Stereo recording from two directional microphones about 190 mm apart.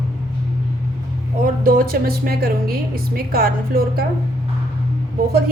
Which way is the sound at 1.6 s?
50° right (ahead or behind).